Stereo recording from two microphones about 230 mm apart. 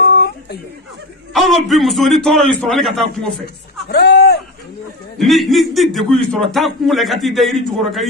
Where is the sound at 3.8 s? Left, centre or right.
Left.